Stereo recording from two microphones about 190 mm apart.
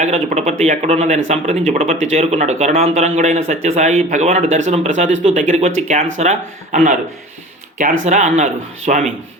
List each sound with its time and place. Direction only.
0.0 s speech: 35° right (ahead or behind)
8.0 s speech: 35° right (ahead or behind)